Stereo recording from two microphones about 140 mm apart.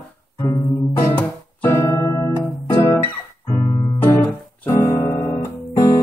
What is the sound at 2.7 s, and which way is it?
Guitar, 15° left (ahead or behind).